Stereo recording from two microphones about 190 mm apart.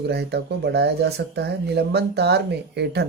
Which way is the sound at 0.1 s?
60° right (ahead or behind).